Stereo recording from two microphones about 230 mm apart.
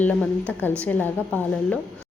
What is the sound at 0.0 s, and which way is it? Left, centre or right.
A woman's voice, centre.